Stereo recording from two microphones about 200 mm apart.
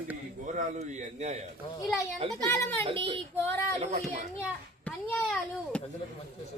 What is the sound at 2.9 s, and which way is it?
Child singing, 25° right (ahead or behind).